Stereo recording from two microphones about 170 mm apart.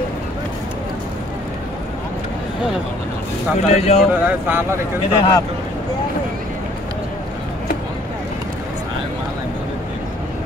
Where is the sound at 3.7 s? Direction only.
40° left (ahead or behind).